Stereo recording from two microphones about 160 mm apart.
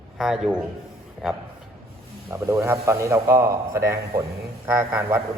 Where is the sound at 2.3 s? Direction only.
20° right (ahead or behind).